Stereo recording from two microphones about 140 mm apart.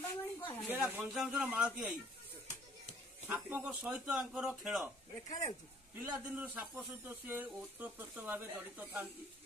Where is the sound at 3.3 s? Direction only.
10° right (ahead or behind).